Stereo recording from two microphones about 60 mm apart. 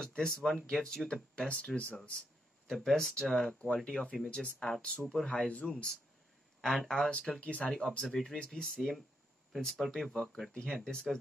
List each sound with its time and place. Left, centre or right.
0.0 s speech: centre
2.7 s speech: centre
7.1 s speech: centre